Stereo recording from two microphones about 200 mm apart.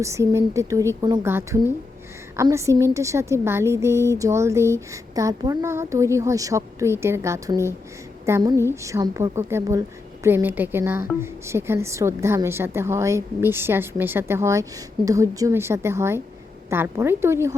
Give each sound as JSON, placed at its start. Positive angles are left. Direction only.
{"t": 0.0, "sound": "a woman's voice", "side_deg": -15}